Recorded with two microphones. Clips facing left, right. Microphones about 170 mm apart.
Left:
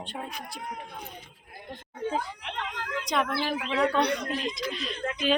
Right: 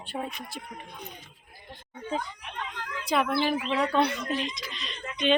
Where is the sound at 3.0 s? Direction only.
5° right (ahead or behind).